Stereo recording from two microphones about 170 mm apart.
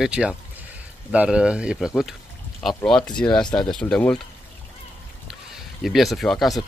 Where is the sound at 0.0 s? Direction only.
5° right (ahead or behind).